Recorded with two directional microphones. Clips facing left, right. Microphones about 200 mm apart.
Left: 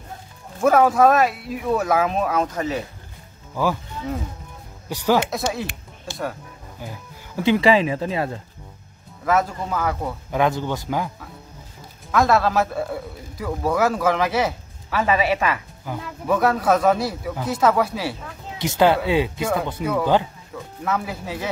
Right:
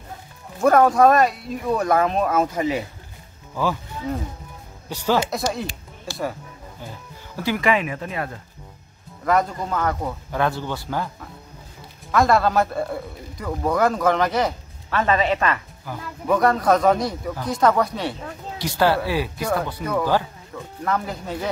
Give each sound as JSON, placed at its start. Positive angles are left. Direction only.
{"t": 0.6, "sound": "a man's voice", "side_deg": 5}
{"t": 2.4, "sound": "speech", "side_deg": -10}
{"t": 4.8, "sound": "speech", "side_deg": 10}
{"t": 5.3, "sound": "a man's voice", "side_deg": 0}
{"t": 6.8, "sound": "speech", "side_deg": 15}
{"t": 9.2, "sound": "speech", "side_deg": 5}
{"t": 12.1, "sound": "a man's voice", "side_deg": 0}
{"t": 18.6, "sound": "a man's voice", "side_deg": 20}